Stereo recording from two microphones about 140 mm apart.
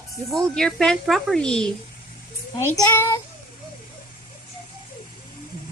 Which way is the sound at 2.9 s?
15° left (ahead or behind).